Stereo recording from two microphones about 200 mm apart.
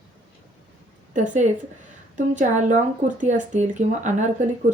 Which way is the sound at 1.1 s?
40° right (ahead or behind).